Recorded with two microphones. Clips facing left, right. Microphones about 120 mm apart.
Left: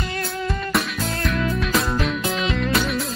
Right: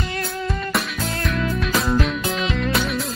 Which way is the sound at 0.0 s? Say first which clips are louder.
Even; centre (ahead or behind).